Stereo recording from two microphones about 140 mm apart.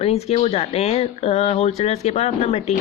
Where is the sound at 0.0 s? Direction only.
50° left (ahead or behind).